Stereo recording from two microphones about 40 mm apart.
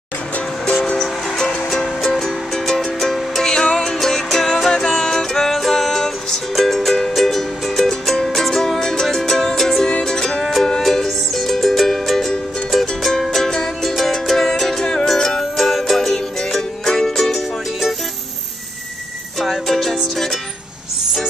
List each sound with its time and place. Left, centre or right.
0.8 s music: centre
3.6 s music: left
3.9 s music: centre
19.4 s music: centre